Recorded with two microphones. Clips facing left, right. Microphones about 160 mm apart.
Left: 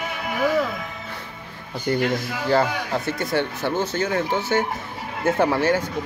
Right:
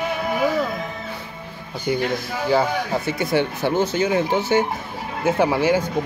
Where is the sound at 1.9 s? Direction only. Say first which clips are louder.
Even; 5° right (ahead or behind).